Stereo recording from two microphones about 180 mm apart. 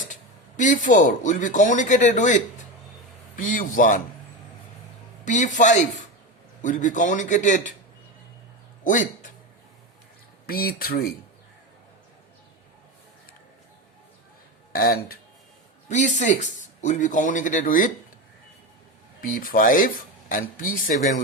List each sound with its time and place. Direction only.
0.1 s speech: 45° left (ahead or behind)
5.2 s speech: 45° left (ahead or behind)
8.8 s a sound: 45° left (ahead or behind)
10.4 s speech: 55° left (ahead or behind)
14.7 s speech: 55° left (ahead or behind)
15.9 s speech: 40° left (ahead or behind)
19.2 s speech: 50° left (ahead or behind)